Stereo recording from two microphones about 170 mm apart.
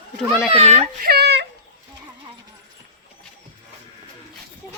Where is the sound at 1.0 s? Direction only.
70° right (ahead or behind).